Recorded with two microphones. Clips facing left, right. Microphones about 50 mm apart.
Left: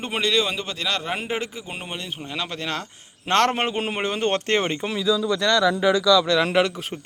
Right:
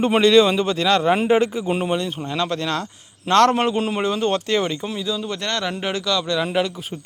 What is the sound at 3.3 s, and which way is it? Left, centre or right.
A man's voice, left.